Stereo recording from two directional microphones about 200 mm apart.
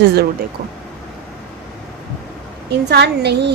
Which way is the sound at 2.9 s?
55° right (ahead or behind).